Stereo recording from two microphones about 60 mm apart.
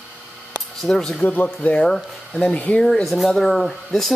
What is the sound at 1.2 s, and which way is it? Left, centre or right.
Speech, left.